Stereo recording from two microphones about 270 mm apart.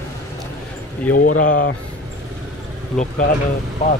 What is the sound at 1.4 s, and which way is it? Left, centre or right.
Speech, left.